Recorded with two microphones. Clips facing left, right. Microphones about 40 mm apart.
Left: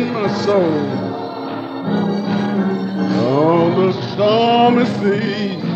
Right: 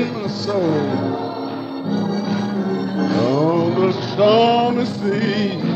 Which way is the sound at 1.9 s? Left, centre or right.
Left.